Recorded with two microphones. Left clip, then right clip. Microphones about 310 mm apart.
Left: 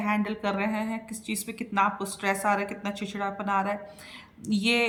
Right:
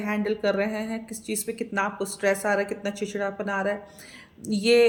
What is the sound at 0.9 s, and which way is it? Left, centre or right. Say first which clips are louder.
A woman's voice: right 3 dB; centre.